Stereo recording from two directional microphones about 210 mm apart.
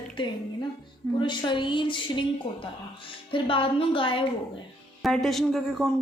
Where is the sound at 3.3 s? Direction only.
25° left (ahead or behind).